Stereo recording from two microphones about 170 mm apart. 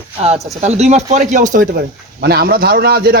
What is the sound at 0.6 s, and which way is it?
A man's voice, 40° right (ahead or behind).